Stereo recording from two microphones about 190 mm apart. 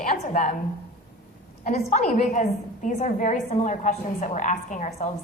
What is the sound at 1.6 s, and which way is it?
A woman's voice, 40° left (ahead or behind).